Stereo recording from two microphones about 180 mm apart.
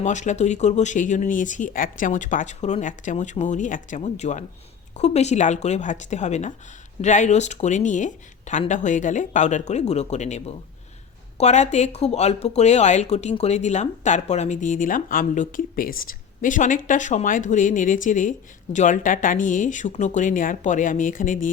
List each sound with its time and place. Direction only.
0.0 s speech: 40° left (ahead or behind)